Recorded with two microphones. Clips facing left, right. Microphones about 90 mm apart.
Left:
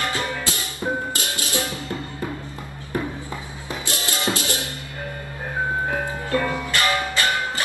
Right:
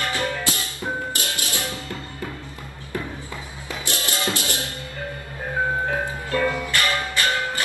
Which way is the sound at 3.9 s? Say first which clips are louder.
Left 1 dB; 20° left (ahead or behind).